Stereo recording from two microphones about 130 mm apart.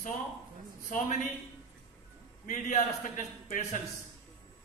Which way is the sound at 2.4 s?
80° left.